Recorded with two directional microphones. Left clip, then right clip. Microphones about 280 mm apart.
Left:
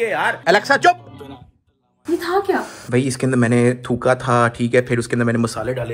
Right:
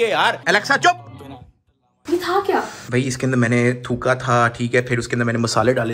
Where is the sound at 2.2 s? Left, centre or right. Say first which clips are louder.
Even; centre.